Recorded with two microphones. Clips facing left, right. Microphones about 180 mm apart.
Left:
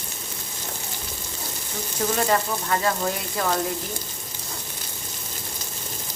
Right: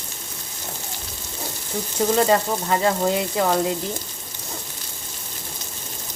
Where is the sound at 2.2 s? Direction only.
20° right (ahead or behind).